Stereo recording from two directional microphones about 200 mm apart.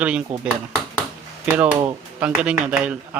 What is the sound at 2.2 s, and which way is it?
Speech, 5° right (ahead or behind).